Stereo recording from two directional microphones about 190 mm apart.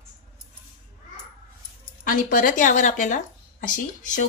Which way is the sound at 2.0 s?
45° left (ahead or behind).